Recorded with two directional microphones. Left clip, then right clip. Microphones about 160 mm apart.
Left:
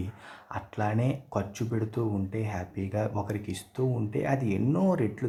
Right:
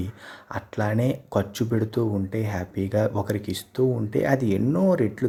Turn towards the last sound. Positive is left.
turn(degrees=-20)  # may be behind; listen again after turning